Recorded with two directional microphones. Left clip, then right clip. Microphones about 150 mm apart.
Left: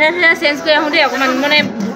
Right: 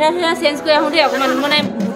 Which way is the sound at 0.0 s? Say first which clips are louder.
Left 3 dB; 10° right (ahead or behind).